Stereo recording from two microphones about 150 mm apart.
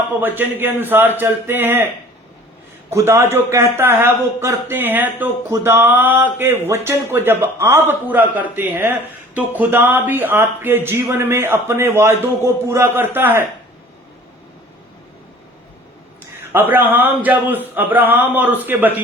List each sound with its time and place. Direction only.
0.2 s speech: 15° right (ahead or behind)
2.9 s speech: 15° right (ahead or behind)
16.5 s speech: 15° right (ahead or behind)